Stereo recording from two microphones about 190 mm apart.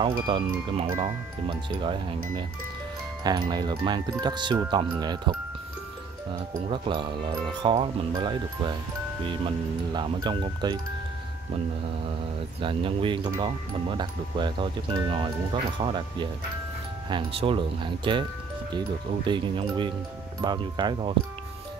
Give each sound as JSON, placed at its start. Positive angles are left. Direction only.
{"t": 0.0, "sound": "speech", "side_deg": -25}
{"t": 6.7, "sound": "speech", "side_deg": -25}
{"t": 12.6, "sound": "speech", "side_deg": -25}
{"t": 17.1, "sound": "speech", "side_deg": -30}